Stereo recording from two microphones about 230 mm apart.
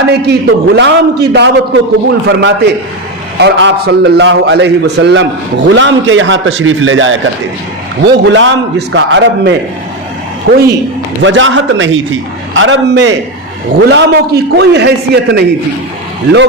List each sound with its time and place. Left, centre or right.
0.1 s a man's voice: right
11.2 s a man's voice: right